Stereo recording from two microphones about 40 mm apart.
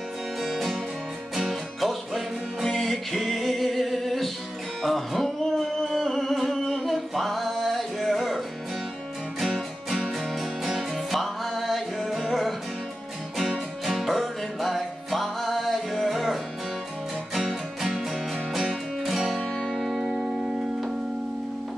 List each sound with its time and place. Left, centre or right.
0.4 s music: centre
9.4 s music: centre
20.2 s music: centre